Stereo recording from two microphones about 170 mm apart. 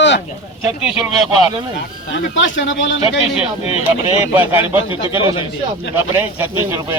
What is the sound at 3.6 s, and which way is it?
Speech, 35° left (ahead or behind).